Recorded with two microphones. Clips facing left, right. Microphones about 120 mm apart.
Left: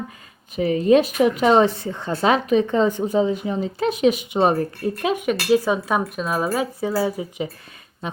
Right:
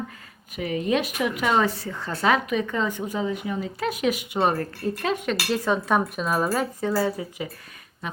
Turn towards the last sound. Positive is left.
turn(degrees=15)  # may be behind; listen again after turning